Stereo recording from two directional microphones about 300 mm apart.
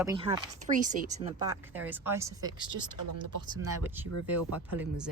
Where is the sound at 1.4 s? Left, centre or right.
Centre.